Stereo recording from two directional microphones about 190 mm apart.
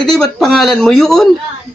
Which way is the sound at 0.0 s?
5° left (ahead or behind).